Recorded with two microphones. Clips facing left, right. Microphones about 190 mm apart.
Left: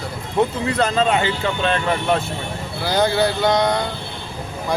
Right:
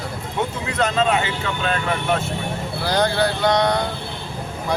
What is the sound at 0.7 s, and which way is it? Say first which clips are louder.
Speech: even; 35° left (ahead or behind).